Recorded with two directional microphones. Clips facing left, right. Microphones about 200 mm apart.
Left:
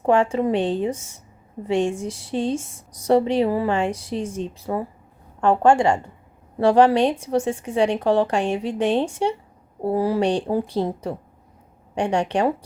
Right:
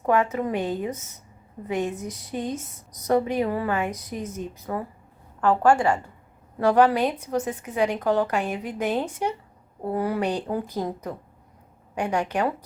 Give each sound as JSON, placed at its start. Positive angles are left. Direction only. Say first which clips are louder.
{"t": 0.0, "sound": "a woman's voice", "louder": "left 4 dB", "side_deg": 30}